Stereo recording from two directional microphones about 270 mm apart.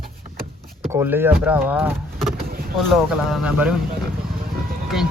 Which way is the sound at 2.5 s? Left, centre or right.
Right.